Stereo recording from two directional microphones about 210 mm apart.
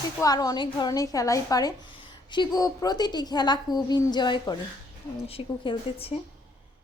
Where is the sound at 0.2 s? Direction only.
15° left (ahead or behind).